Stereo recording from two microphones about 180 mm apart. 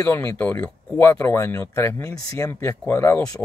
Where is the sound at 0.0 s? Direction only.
15° left (ahead or behind).